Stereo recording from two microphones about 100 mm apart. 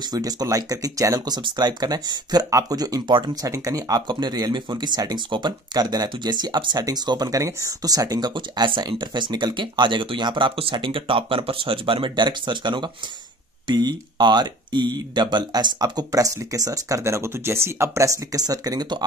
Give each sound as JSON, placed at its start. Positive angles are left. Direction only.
{"t": 0.1, "sound": "speech", "side_deg": -35}
{"t": 8.4, "sound": "speech", "side_deg": -55}